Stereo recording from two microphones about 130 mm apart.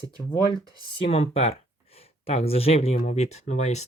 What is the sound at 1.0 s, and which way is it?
Speech, 50° left (ahead or behind).